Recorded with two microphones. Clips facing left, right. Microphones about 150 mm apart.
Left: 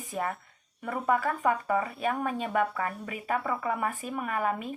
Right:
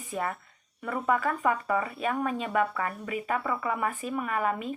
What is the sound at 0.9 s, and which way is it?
Speech, 40° left (ahead or behind).